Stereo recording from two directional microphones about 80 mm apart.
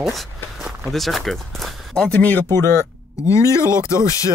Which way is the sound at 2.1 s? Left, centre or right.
Left.